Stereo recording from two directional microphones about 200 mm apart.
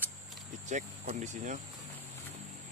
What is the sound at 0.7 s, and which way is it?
Speech, 35° right (ahead or behind).